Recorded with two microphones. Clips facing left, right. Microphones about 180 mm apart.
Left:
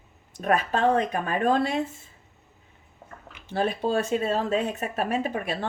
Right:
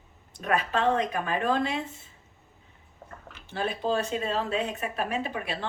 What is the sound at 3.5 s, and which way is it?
Speech, 45° left (ahead or behind).